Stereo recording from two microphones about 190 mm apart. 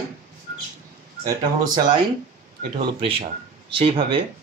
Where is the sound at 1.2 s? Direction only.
20° right (ahead or behind).